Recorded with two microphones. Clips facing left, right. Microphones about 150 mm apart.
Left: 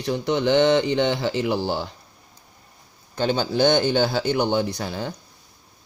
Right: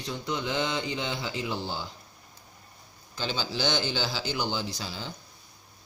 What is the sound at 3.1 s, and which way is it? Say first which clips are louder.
Speech: left 10 dB; 55° left (ahead or behind).